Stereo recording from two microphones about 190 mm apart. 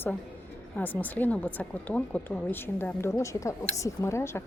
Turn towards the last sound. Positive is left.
turn(degrees=15)  # may be behind; listen again after turning